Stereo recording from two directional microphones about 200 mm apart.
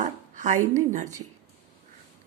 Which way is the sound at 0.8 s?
40° right (ahead or behind).